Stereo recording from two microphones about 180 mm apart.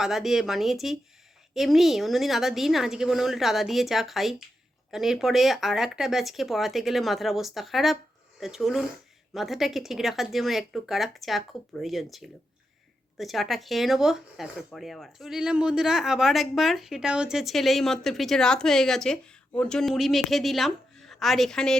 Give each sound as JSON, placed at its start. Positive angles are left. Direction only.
{"t": 0.0, "sound": "speech", "side_deg": 0}